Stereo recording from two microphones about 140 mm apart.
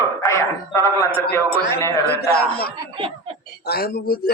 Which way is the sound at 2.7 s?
40° right (ahead or behind).